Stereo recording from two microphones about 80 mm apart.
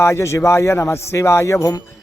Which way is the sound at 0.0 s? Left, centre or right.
Left.